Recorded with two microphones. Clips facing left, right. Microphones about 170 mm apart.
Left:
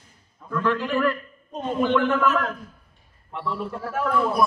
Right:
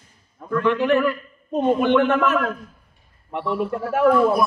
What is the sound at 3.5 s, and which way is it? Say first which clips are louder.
Speech: right 7 dB; 65° right (ahead or behind).